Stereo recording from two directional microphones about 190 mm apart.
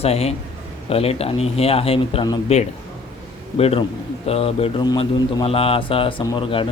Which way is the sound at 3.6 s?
30° left (ahead or behind).